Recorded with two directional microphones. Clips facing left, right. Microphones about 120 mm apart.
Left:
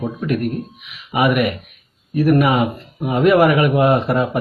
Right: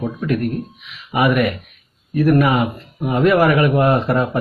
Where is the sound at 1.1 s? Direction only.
20° left (ahead or behind).